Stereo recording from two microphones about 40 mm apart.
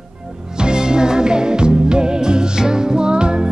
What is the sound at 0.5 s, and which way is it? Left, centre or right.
Music, centre.